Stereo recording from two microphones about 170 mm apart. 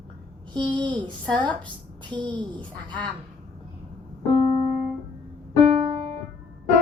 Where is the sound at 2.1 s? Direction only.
25° right (ahead or behind).